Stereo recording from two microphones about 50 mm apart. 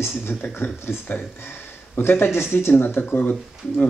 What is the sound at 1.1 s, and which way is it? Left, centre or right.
Speech, left.